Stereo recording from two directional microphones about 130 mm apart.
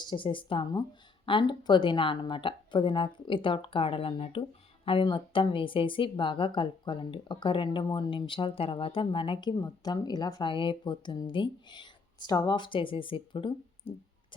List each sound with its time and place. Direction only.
0.0 s speech: 35° left (ahead or behind)